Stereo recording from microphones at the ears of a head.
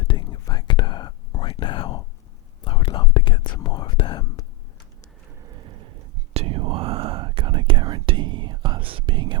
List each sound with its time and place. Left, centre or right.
0.0 s whispering: left
5.3 s whispering: right